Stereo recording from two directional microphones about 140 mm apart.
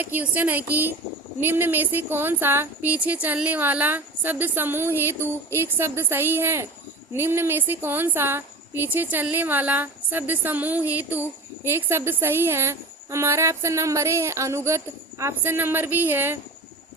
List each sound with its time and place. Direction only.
0.0 s a woman's voice: 15° right (ahead or behind)